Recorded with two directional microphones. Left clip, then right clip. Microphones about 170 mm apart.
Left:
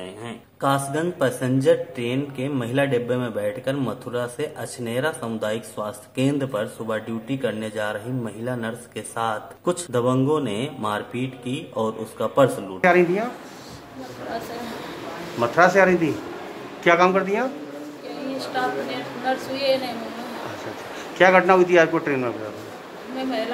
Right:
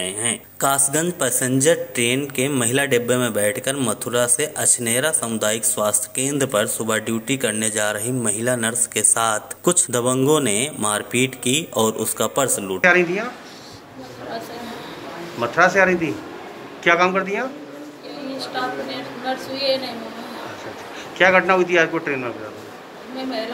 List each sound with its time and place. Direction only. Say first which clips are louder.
0.0 s speech: right 9 dB; 25° right (ahead or behind)
12.8 s speech: right 1 dB; 15° left (ahead or behind)
15.4 s a man's voice: even; 25° left (ahead or behind)
19.5 s a woman's voice: right 1 dB; 35° left (ahead or behind)
21.2 s a man's voice: even; 30° left (ahead or behind)